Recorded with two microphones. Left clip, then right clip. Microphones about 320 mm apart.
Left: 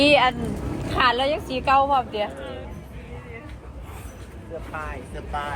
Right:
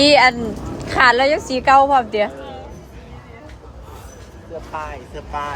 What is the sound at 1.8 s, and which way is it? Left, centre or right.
Speech, right.